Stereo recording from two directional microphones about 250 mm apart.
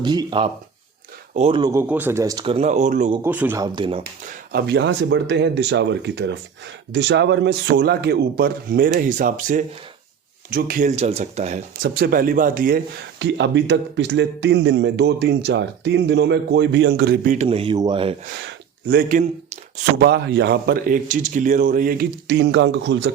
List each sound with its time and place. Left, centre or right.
0.0 s speech: centre
3.2 s speech: centre
4.0 s a man's voice: right
18.3 s a man's voice: right